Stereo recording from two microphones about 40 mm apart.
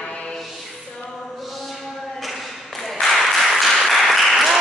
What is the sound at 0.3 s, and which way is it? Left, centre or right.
Music, centre.